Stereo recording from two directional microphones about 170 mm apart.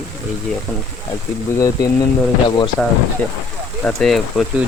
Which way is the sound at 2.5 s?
25° left (ahead or behind).